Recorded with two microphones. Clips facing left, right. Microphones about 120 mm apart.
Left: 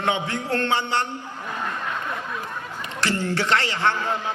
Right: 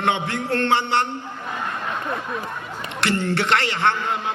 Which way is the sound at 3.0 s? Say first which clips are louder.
Right 2 dB; 65° right (ahead or behind).